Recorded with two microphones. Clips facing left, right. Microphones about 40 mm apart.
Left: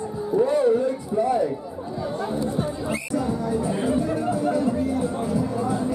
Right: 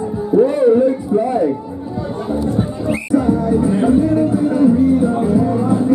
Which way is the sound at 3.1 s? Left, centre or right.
Right.